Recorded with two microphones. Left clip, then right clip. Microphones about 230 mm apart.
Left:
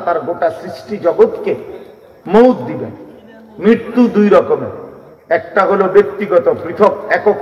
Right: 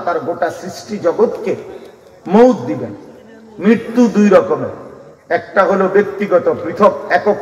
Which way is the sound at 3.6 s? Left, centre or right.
Left.